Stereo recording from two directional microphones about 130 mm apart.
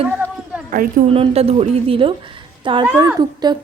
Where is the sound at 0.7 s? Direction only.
90° right.